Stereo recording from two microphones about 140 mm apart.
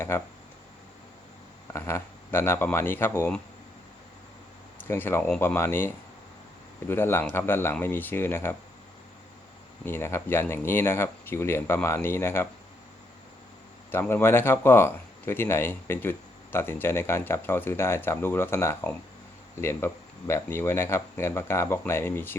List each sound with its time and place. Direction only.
0.1 s speech: 15° left (ahead or behind)
1.7 s speech: 20° left (ahead or behind)
4.8 s speech: 15° left (ahead or behind)
9.8 s speech: 15° left (ahead or behind)
13.9 s speech: 15° left (ahead or behind)